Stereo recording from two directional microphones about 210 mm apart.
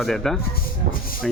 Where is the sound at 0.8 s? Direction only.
50° right (ahead or behind).